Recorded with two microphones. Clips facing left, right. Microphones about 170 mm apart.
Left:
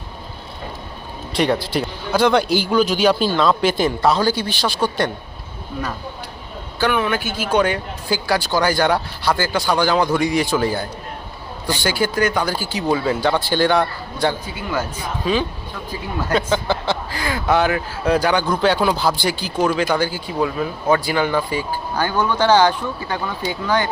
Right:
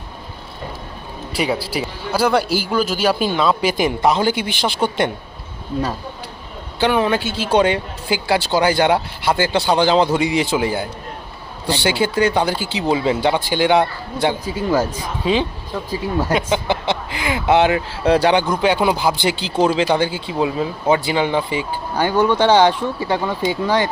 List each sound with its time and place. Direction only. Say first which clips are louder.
1.3 s a man's voice: left 2 dB; 5° right (ahead or behind)
6.7 s speech: right 3 dB; 25° right (ahead or behind)
14.4 s speech: right 6 dB; 35° right (ahead or behind)
15.2 s speech: right 2 dB; 25° right (ahead or behind)